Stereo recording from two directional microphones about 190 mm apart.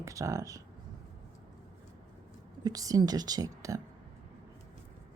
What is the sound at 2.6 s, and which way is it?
A woman's voice, 20° right (ahead or behind).